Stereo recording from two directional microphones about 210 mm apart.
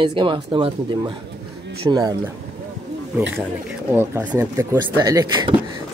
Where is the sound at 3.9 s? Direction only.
10° right (ahead or behind).